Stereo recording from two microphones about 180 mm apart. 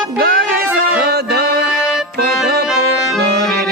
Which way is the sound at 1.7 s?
10° left (ahead or behind).